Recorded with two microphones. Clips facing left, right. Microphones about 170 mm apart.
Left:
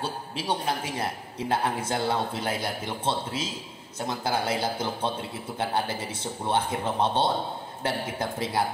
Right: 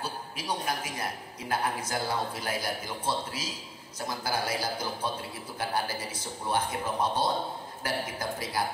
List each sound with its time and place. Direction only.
0.0 s a man's voice: 30° left (ahead or behind)